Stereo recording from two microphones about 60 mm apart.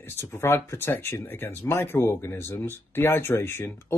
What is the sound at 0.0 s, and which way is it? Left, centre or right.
Speech, left.